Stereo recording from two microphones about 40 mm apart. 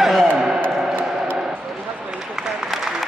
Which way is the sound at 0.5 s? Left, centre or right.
Right.